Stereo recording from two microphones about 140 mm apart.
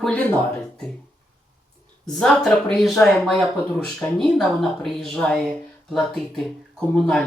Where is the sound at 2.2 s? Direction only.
5° left (ahead or behind).